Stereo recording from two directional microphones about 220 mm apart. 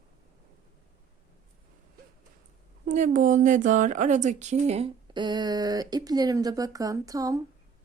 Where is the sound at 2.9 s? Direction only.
35° right (ahead or behind); by 7.4 s 15° right (ahead or behind).